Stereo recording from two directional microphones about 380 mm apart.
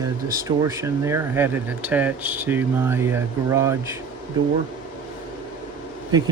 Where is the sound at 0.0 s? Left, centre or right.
Centre.